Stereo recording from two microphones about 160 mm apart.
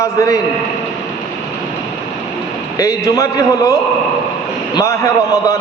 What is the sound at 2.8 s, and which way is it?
Speech, 20° left (ahead or behind).